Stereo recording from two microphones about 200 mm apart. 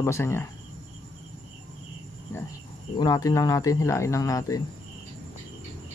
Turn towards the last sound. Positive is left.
turn(degrees=15)  # may be behind; listen again after turning